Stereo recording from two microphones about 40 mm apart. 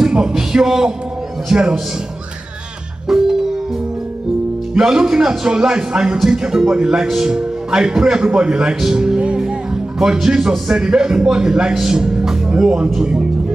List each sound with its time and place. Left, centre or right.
0.0 s a sound: right
0.3 s a man's voice: centre
3.1 s music: centre
4.7 s a man's voice: centre
9.4 s music: centre
10.1 s a man's voice: centre